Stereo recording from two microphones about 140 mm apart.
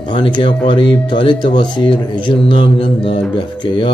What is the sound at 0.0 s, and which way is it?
Speech, 35° left (ahead or behind).